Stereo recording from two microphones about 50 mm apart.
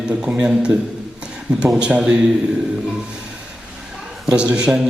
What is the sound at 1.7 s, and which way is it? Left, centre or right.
Speech, centre.